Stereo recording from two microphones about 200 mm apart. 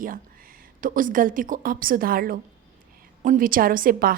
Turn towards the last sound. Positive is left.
turn(degrees=-45)  # may be behind; listen again after turning